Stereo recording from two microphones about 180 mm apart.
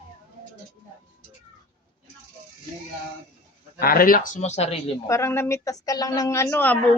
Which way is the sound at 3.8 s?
55° left (ahead or behind).